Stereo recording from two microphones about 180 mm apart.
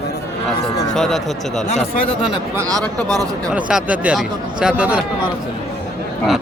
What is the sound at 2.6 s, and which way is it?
Speech, 20° right (ahead or behind).